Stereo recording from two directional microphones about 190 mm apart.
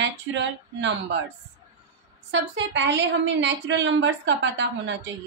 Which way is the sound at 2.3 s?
70° right (ahead or behind).